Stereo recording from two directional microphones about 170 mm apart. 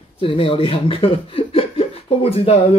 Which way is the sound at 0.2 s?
30° left (ahead or behind).